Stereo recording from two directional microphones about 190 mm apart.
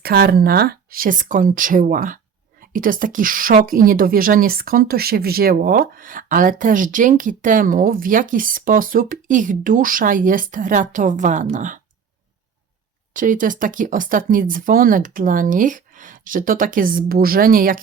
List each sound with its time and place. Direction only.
0.0 s speech: 55° right (ahead or behind)
13.1 s speech: 45° right (ahead or behind)